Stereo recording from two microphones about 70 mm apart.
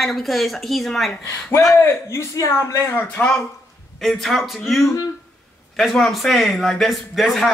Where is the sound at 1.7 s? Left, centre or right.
Left.